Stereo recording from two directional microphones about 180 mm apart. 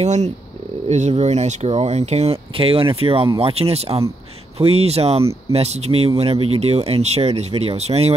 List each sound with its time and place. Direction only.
0.0 s speech: 40° right (ahead or behind)